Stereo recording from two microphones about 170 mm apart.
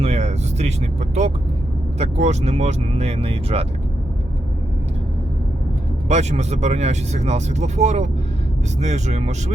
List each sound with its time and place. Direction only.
0.0 s vehicle: 40° right (ahead or behind)
2.0 s speech: 40° right (ahead or behind)
6.1 s speech: 40° right (ahead or behind)